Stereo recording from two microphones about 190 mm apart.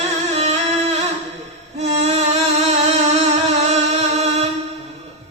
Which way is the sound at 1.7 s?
35° right (ahead or behind).